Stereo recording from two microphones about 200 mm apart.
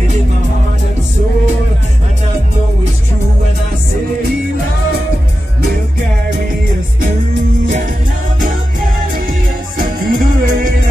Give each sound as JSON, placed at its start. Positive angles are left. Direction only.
{"t": 9.8, "sound": "music", "side_deg": -45}